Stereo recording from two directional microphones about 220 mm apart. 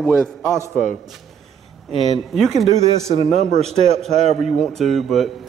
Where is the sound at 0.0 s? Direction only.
10° right (ahead or behind).